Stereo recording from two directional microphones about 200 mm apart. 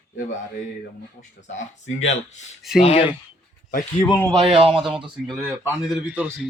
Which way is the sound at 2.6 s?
Centre (ahead or behind).